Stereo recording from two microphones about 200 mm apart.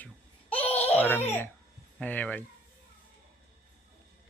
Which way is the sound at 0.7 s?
30° left (ahead or behind).